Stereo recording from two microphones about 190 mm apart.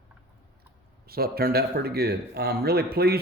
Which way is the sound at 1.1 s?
55° right (ahead or behind).